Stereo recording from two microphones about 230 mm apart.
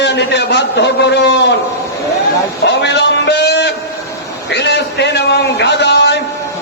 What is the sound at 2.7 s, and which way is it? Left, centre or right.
A man's voice, left.